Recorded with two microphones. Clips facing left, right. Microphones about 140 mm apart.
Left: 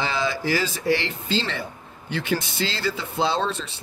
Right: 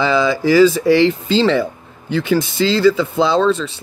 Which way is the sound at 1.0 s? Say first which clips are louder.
Right 13 dB; 90° right.